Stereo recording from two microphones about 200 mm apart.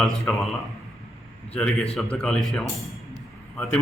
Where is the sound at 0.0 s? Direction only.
Centre (ahead or behind).